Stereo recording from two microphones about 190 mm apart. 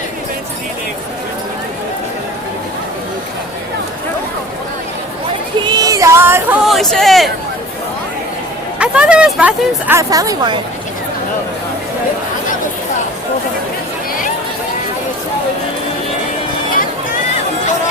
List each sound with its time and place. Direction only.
5.6 s music: 20° right (ahead or behind)
6.7 s a sound: centre (ahead or behind)
8.8 s speech: 5° right (ahead or behind); by 10.6 s 20° right (ahead or behind)